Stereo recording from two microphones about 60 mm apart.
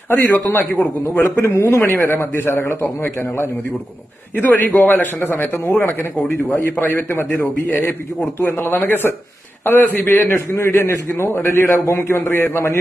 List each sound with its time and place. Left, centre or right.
0.1 s a man's voice: left
1.4 s a man's voice: left
4.4 s a man's voice: left
6.6 s a man's voice: left
8.5 s a man's voice: left